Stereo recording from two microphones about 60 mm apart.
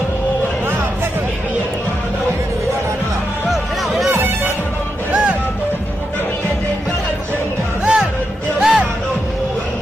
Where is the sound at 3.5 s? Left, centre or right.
Centre.